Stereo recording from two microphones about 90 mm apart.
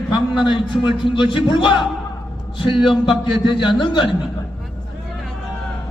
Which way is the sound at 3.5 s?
60° left (ahead or behind).